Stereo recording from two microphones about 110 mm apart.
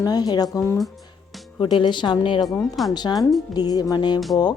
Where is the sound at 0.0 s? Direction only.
35° left (ahead or behind).